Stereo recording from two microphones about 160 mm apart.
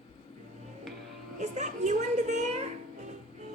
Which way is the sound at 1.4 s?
45° right (ahead or behind).